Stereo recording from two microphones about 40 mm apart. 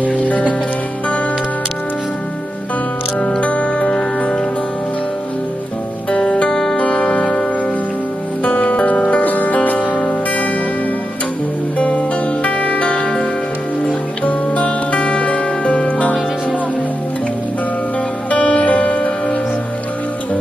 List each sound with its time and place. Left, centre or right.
0.3 s music: left
3.2 s music: left
6.0 s music: left
8.5 s music: left
9.2 s music: left
11.8 s music: left
14.2 s music: left
18.3 s music: left